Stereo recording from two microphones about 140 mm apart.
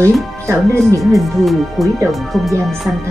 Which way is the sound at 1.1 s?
Centre (ahead or behind).